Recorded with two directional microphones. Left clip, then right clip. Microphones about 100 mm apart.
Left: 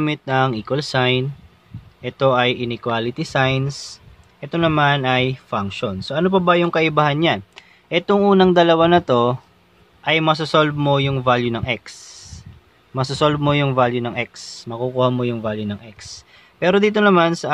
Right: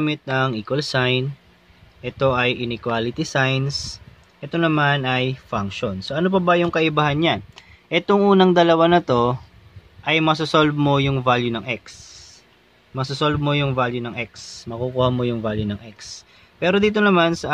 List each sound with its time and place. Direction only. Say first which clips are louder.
0.0 s speech: left 3 dB; 45° left (ahead or behind)
4.5 s speech: left 2 dB; 45° left (ahead or behind); by 7.6 s 25° left (ahead or behind)
7.9 s speech: left 1 dB; 10° left (ahead or behind)
11.2 s speech: left 2 dB; 15° left (ahead or behind)
11.5 s speech: left 3 dB; 40° left (ahead or behind)
11.8 s a sound: left 3 dB; 65° left (ahead or behind)
12.9 s a man's voice: left 4 dB; 70° left (ahead or behind); by 14.8 s 50° left (ahead or behind)
15.0 s speech: left 1 dB; 20° left (ahead or behind)
16.0 s speech: even; 30° left (ahead or behind)